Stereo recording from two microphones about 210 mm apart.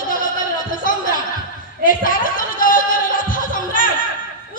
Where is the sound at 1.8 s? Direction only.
40° left (ahead or behind).